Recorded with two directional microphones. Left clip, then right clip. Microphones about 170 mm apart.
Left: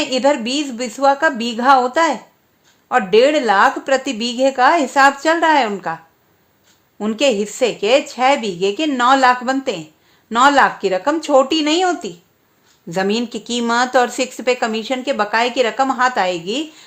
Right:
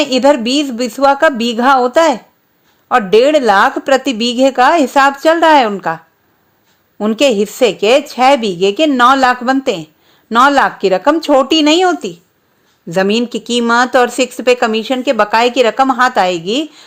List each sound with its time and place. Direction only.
0.0 s speech: 40° right (ahead or behind)
7.0 s speech: 35° right (ahead or behind)